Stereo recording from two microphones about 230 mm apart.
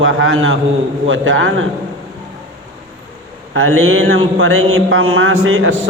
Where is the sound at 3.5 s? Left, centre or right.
Right.